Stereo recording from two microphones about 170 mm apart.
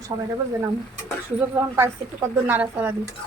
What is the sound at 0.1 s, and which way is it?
Speech, 25° right (ahead or behind).